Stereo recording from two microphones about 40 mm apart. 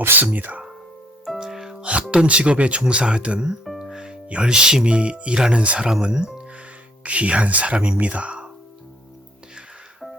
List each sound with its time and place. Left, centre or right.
0.2 s speech: right
1.4 s music: centre
1.8 s speech: right
3.8 s music: centre
4.3 s speech: right
5.9 s speech: right
7.0 s speech: right